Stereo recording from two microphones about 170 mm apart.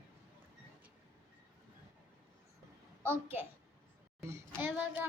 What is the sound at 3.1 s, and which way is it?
Speech, 15° right (ahead or behind).